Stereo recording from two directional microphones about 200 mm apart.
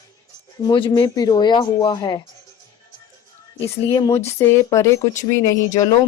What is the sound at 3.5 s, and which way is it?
Speech, 15° left (ahead or behind).